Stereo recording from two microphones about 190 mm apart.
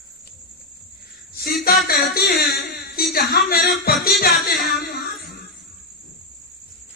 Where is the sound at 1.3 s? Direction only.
55° left (ahead or behind).